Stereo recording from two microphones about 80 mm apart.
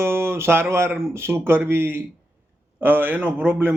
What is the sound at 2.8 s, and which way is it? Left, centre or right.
Speech, right.